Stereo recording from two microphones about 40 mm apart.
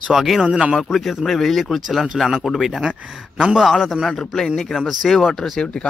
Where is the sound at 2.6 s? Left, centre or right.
Centre.